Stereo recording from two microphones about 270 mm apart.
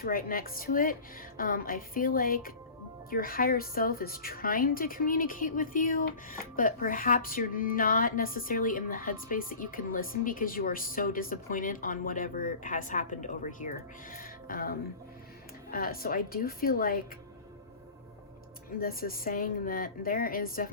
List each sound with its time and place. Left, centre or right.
0.0 s a woman's voice: left
18.8 s a woman's voice: left